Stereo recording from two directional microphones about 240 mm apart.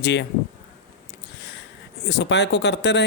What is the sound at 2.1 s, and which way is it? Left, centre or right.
Speech, left.